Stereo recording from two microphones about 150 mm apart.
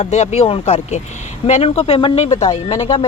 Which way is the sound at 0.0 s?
45° left (ahead or behind).